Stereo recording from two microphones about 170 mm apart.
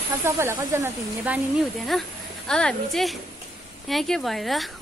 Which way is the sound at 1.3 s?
Centre (ahead or behind).